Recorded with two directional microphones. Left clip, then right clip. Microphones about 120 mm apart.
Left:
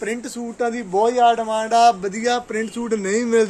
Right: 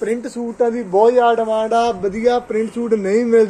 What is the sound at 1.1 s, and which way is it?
Speech, 75° left (ahead or behind).